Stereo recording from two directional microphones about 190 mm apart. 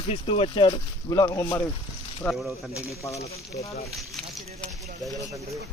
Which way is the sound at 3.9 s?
Centre (ahead or behind).